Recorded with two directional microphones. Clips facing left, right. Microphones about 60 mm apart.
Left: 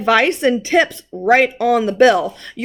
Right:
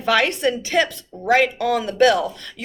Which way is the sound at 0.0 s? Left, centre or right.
Left.